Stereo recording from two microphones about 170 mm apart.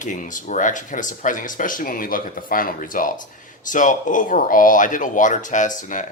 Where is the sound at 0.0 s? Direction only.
50° left (ahead or behind).